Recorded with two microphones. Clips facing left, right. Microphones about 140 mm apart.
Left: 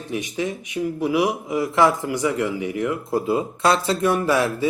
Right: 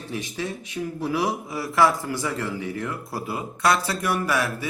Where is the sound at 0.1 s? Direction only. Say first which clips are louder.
Left 5 dB; 15° left (ahead or behind).